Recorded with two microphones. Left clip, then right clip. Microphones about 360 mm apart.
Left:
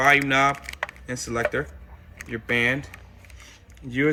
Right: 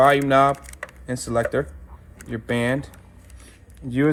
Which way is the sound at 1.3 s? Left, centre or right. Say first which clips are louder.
Right 3 dB; centre.